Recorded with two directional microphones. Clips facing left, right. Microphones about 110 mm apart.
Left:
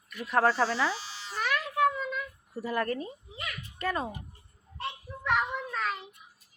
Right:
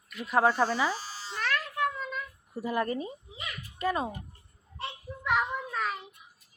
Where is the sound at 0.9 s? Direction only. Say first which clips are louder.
Right 2 dB; 40° right (ahead or behind).